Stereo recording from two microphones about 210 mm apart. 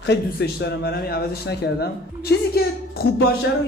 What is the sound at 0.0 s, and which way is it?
Speech, 55° left (ahead or behind).